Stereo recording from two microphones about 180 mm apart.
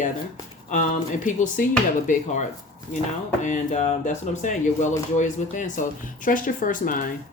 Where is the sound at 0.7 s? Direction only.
45° left (ahead or behind).